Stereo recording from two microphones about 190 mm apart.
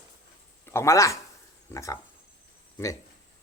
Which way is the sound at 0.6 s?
15° left (ahead or behind).